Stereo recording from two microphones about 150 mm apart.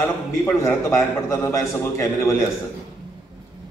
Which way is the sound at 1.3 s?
20° left (ahead or behind).